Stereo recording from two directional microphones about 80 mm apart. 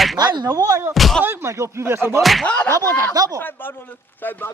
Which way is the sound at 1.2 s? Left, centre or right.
Right.